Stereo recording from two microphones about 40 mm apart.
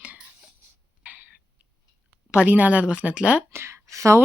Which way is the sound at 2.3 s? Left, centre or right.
Right.